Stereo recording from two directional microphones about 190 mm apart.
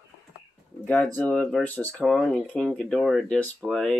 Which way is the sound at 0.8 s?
10° left (ahead or behind).